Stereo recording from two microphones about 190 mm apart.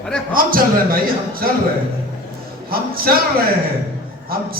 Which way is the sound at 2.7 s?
50° right (ahead or behind).